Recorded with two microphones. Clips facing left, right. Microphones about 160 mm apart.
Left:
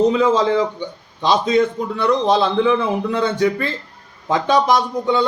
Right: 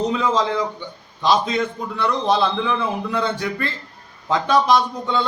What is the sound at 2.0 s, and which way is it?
A man's voice, 20° left (ahead or behind).